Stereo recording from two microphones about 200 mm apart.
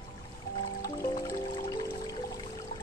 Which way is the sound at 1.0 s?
20° left (ahead or behind).